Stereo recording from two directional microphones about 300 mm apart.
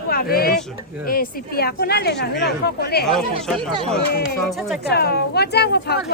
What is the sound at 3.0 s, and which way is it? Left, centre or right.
Speech, centre.